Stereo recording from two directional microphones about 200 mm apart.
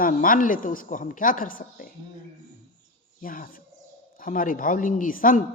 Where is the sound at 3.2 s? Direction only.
45° left (ahead or behind).